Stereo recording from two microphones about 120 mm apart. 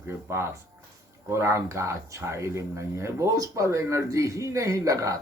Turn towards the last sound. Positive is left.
turn(degrees=-25)  # may be behind; listen again after turning